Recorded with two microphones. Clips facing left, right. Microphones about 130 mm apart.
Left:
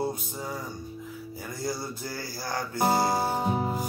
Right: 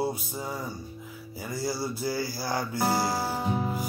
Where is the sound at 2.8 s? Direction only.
20° left (ahead or behind).